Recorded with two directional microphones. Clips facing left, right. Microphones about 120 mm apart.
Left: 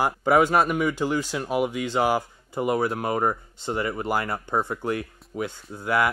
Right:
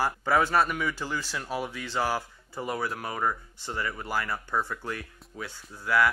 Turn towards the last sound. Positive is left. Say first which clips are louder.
# left 2 dB
turn(degrees=20)  # may be behind; listen again after turning